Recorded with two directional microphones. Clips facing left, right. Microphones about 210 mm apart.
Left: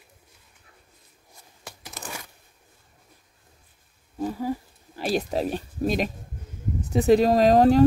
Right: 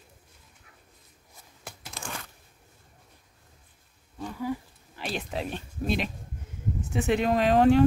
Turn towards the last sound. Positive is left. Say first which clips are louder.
# left 3 dB
turn(degrees=40)  # may be behind; listen again after turning